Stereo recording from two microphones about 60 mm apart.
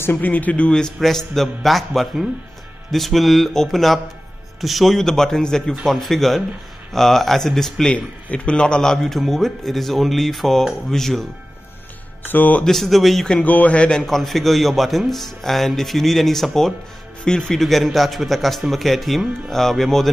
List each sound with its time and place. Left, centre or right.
0.0 s speech: left; by 0.9 s centre
0.9 s a man's voice: centre
7.9 s a man's voice: centre
12.3 s speech: left
12.6 s a man's voice: centre
13.3 s a man's voice: left; by 20.1 s centre